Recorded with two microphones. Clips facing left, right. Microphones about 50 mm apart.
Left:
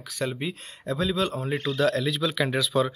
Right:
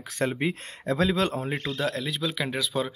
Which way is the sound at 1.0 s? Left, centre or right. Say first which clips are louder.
Right 1 dB; right.